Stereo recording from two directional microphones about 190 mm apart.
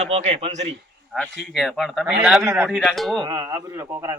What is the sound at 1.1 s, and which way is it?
Speech, 5° left (ahead or behind).